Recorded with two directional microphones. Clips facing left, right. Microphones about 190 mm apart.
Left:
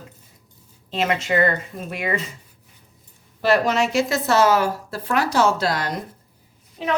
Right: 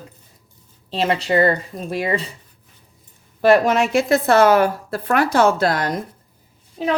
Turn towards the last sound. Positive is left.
turn(degrees=-35)  # may be behind; listen again after turning